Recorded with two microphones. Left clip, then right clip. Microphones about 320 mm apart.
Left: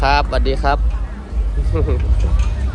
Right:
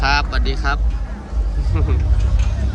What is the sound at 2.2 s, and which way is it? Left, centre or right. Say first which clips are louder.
Speech: left 2 dB; right.